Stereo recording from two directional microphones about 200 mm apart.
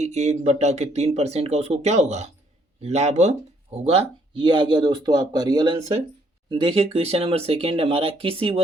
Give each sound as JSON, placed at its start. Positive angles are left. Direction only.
{"t": 0.0, "sound": "speech", "side_deg": -35}